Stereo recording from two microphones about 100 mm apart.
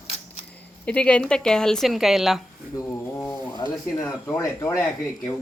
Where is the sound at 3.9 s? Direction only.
35° left (ahead or behind).